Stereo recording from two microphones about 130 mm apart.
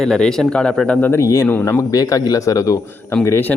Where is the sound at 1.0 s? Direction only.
15° left (ahead or behind).